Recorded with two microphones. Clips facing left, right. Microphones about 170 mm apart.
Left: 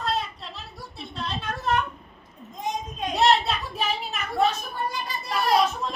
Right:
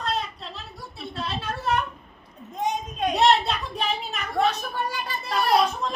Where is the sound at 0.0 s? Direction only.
Centre (ahead or behind).